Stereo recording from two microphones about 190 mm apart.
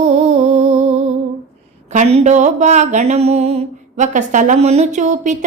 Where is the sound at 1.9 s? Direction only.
40° right (ahead or behind).